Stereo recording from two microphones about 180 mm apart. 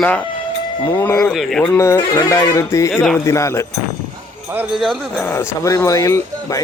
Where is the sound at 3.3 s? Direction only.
15° left (ahead or behind).